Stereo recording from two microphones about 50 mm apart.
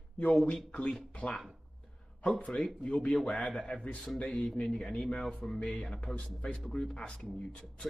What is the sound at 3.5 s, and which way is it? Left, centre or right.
Speech, left.